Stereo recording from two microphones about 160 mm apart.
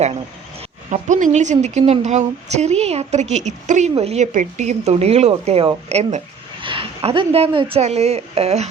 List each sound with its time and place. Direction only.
0.9 s a woman's voice: 50° right (ahead or behind)
6.6 s speech: 35° right (ahead or behind)